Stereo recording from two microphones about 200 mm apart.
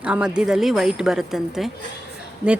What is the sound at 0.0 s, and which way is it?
A woman's voice, 5° right (ahead or behind).